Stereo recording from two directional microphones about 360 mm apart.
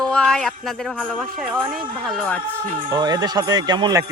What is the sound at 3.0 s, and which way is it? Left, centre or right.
Speech, centre.